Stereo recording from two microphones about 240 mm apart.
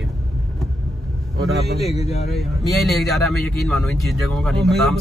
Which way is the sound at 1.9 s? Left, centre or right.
Left.